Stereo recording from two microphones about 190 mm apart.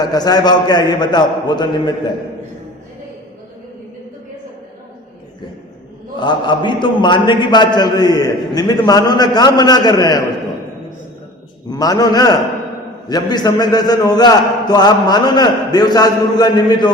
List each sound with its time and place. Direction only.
0.0 s a man's voice: 20° left (ahead or behind)
6.1 s a man's voice: 25° left (ahead or behind)
11.7 s a man's voice: 20° left (ahead or behind)